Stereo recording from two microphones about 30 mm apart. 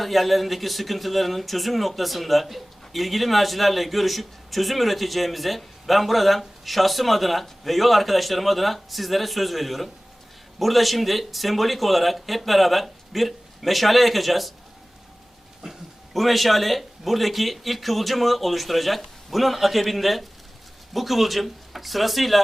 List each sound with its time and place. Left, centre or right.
0.0 s speech: centre
15.6 s a sound: right
16.1 s speech: centre